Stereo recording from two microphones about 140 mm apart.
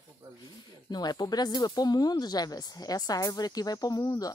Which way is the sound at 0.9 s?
30° left (ahead or behind).